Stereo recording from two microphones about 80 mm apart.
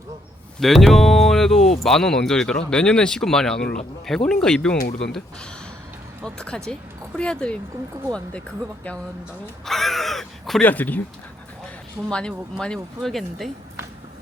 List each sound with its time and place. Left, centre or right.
0.6 s speech: centre
9.6 s speech: centre
10.6 s speech: left
12.1 s speech: centre